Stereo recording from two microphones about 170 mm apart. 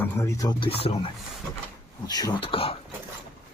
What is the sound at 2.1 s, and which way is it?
Speech, 25° left (ahead or behind).